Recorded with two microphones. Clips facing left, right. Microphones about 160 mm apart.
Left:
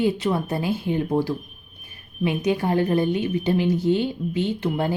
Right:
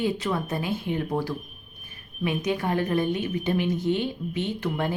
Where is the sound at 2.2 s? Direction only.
30° left (ahead or behind).